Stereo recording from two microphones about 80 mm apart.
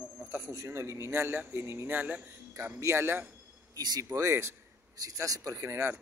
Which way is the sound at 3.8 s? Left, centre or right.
Right.